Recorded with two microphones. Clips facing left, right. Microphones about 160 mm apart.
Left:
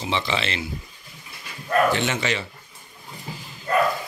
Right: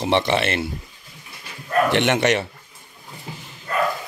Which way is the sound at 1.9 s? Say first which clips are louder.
Right 5 dB; 70° right (ahead or behind).